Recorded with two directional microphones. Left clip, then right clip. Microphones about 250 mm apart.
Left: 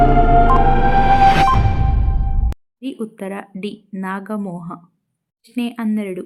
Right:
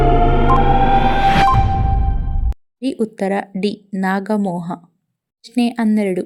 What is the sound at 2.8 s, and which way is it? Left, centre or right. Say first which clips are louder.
A woman's voice: right 8 dB; centre.